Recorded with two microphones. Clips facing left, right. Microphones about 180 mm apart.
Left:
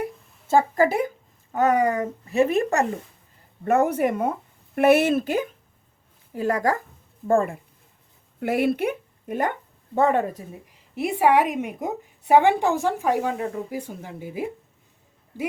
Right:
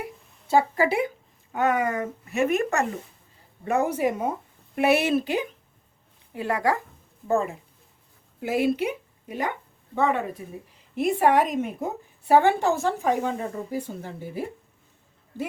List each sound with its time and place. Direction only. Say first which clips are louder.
0.0 s a sound: left 6 dB; 45° left (ahead or behind)
1.5 s speech: left 4 dB; 40° left (ahead or behind)
3.6 s speech: left 3 dB; 55° left (ahead or behind)
10.9 s a woman's voice: left 1 dB; 10° left (ahead or behind)